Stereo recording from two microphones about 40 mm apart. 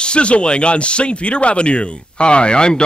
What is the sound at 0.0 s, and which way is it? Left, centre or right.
Speech, left.